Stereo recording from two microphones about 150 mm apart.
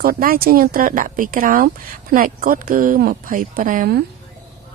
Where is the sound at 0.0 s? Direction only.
75° right (ahead or behind).